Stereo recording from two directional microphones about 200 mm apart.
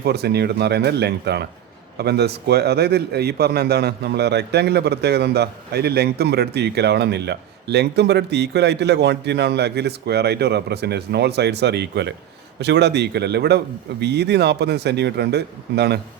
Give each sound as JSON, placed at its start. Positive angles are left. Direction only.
{"t": 0.0, "sound": "a man's voice", "side_deg": -55}